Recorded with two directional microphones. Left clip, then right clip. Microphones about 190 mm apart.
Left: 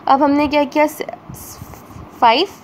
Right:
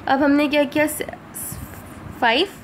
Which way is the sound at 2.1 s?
15° left (ahead or behind).